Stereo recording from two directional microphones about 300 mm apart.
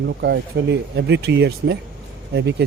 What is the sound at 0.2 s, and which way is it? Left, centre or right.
A man's voice, right.